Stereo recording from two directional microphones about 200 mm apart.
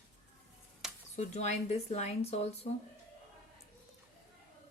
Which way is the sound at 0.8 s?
5° right (ahead or behind).